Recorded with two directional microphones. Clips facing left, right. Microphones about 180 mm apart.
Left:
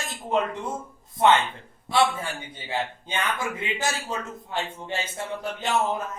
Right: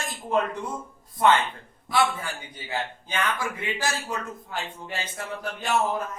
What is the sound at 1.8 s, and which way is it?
A man's voice, 25° left (ahead or behind).